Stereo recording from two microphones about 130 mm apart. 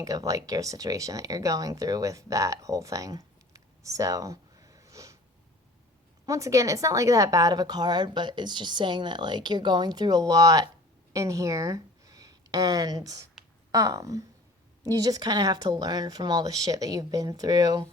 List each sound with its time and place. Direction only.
0.0 s speech: 25° right (ahead or behind)
6.2 s speech: 25° right (ahead or behind)